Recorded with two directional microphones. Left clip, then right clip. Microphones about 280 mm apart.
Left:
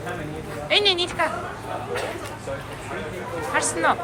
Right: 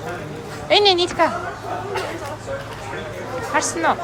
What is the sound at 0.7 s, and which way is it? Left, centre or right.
Speech, centre.